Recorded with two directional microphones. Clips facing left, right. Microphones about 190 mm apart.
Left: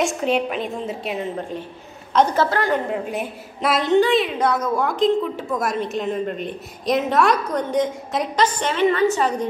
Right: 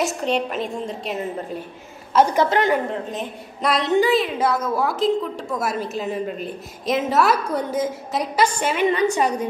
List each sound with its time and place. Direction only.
0.0 s a woman's voice: centre (ahead or behind)
2.1 s a woman's voice: 15° right (ahead or behind)
2.9 s a woman's voice: 10° left (ahead or behind); by 9.5 s 15° right (ahead or behind)